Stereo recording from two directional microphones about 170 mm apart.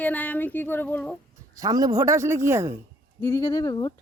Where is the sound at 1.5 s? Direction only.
20° right (ahead or behind).